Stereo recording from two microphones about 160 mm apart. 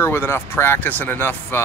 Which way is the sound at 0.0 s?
15° left (ahead or behind).